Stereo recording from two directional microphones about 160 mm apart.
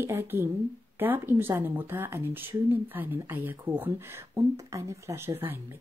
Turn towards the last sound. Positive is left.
turn(degrees=-15)  # may be behind; listen again after turning